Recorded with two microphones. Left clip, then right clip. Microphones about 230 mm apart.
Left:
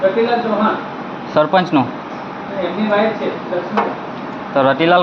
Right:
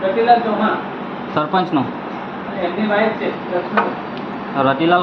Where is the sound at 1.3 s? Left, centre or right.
Left.